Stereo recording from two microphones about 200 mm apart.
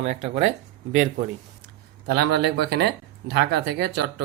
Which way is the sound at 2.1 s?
55° right (ahead or behind).